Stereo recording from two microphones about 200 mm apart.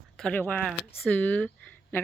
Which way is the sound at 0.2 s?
5° left (ahead or behind).